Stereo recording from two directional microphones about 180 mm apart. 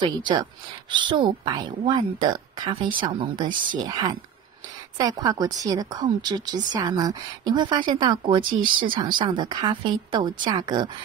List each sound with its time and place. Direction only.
0.9 s speech: 25° right (ahead or behind)